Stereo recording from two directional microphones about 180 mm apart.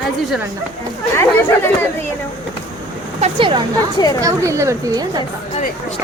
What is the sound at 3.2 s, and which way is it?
Speech, 30° right (ahead or behind).